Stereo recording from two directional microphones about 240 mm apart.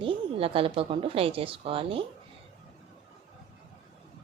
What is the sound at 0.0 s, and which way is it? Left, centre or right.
Speech, right.